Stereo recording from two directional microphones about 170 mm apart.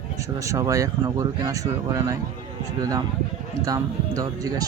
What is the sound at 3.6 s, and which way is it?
Speech, 20° right (ahead or behind).